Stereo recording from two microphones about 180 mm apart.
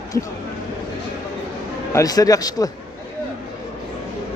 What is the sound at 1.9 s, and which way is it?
Speech, 20° left (ahead or behind).